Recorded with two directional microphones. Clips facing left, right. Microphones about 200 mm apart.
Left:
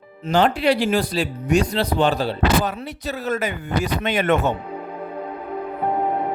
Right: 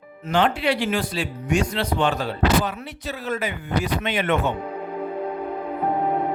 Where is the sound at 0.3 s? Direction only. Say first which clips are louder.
Left 3 dB; 40° left (ahead or behind).